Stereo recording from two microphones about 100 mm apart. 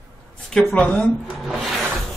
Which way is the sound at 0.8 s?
10° left (ahead or behind).